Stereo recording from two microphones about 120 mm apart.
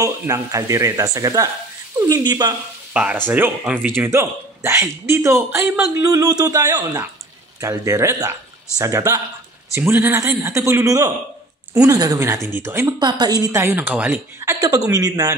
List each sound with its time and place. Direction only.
0.0 s a woman's voice: 25° right (ahead or behind)
2.9 s speech: 10° right (ahead or behind); by 9.2 s 30° right (ahead or behind)
9.8 s speech: 15° right (ahead or behind)
13.0 s a woman's voice: 35° right (ahead or behind)
13.7 s speech: 15° right (ahead or behind)
14.4 s a woman's voice: 25° right (ahead or behind)